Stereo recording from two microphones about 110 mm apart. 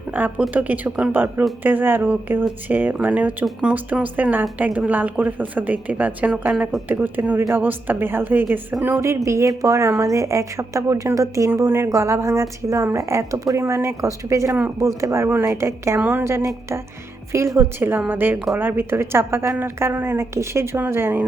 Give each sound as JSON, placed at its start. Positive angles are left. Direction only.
{"t": 0.1, "sound": "a woman's voice", "side_deg": -15}